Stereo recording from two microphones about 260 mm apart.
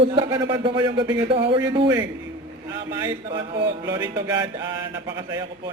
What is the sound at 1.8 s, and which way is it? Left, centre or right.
Music, centre.